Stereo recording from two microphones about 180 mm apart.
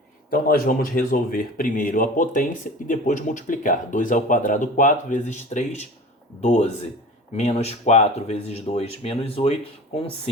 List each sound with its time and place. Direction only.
0.3 s speech: 55° left (ahead or behind); by 10.0 s 35° left (ahead or behind)